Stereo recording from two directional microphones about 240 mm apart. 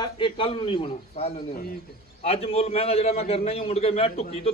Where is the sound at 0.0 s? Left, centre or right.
Left.